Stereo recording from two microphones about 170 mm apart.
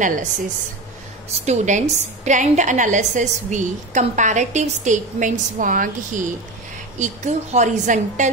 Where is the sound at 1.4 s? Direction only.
45° right (ahead or behind).